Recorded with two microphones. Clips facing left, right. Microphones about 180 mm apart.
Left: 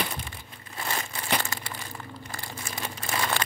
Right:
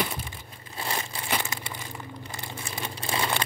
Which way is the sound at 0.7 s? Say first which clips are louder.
Right 1 dB; 15° right (ahead or behind).